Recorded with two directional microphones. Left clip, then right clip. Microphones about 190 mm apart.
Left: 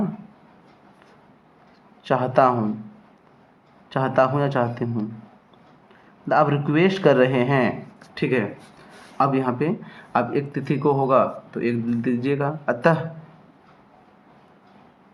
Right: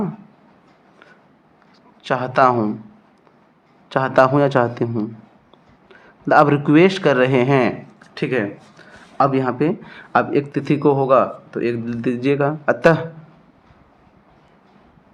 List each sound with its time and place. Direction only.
2.0 s speech: 35° right (ahead or behind)
3.8 s speech: 35° right (ahead or behind)
5.9 s a man's voice: 35° right (ahead or behind)